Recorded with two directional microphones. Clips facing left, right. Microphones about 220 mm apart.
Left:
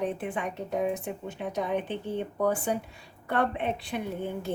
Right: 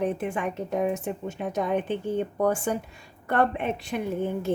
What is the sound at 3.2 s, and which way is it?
Speech, 45° right (ahead or behind).